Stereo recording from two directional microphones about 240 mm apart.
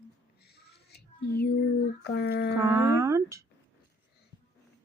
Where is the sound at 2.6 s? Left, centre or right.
Centre.